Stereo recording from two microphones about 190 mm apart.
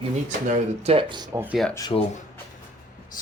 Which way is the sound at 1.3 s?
10° right (ahead or behind).